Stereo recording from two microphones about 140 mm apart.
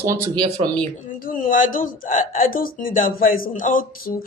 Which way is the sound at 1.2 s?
75° left (ahead or behind).